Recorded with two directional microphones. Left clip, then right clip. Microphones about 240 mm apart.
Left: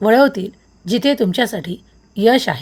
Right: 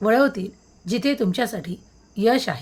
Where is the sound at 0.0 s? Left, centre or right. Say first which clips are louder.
Left 6 dB; left.